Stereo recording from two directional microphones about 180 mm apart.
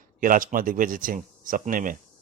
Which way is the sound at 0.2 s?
50° right (ahead or behind).